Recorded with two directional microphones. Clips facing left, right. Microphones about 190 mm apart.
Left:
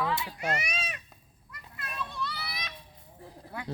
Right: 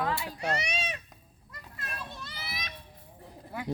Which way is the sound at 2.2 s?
45° right (ahead or behind).